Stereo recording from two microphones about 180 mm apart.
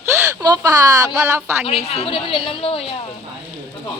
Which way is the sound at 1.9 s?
30° left (ahead or behind).